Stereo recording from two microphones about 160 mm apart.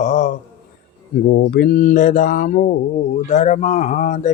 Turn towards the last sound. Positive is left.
turn(degrees=50)  # may be behind; listen again after turning